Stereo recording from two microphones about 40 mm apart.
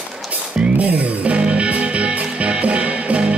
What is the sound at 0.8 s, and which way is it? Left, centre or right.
Music, right.